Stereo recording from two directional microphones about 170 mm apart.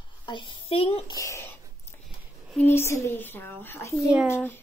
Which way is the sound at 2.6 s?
15° left (ahead or behind).